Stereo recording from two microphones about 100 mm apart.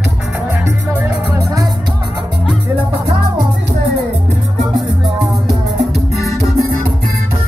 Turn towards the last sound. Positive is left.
turn(degrees=30)  # may be behind; listen again after turning